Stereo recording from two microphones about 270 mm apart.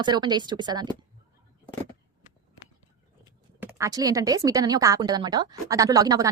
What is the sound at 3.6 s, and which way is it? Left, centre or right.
Speech, centre.